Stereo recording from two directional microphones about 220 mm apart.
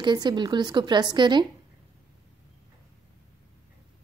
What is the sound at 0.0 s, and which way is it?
A woman's voice, 20° right (ahead or behind).